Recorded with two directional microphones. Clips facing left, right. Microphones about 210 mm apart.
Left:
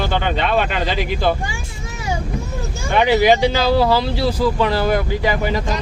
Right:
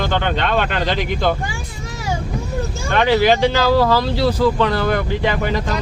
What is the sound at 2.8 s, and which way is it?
Speech, 15° left (ahead or behind).